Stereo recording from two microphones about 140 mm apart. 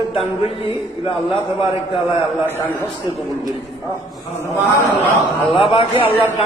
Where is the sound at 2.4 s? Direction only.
15° left (ahead or behind).